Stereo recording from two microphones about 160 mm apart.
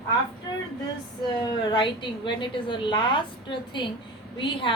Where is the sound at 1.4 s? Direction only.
30° left (ahead or behind).